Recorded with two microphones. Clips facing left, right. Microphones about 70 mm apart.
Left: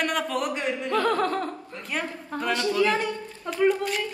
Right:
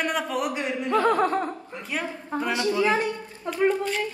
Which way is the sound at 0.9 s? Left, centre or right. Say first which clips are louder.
Right 3 dB; right.